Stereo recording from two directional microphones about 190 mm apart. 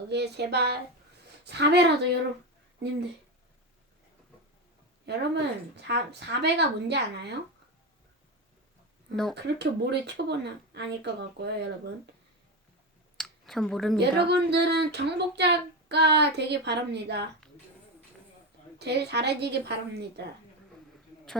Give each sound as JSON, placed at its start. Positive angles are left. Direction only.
{"t": 0.1, "sound": "speech", "side_deg": -60}
{"t": 5.0, "sound": "speech", "side_deg": -65}
{"t": 9.3, "sound": "speech", "side_deg": -65}
{"t": 13.1, "sound": "a sound", "side_deg": 0}
{"t": 14.0, "sound": "speech", "side_deg": -60}
{"t": 18.8, "sound": "speech", "side_deg": -60}